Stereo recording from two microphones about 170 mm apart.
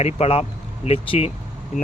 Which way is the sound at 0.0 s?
35° left (ahead or behind).